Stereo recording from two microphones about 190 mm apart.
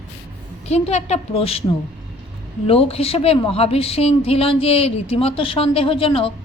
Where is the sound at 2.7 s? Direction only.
30° left (ahead or behind).